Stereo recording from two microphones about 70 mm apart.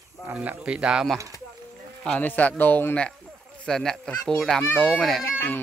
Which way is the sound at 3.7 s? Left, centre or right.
Centre.